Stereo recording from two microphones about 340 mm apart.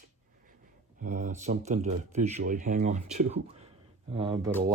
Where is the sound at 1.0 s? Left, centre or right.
Right.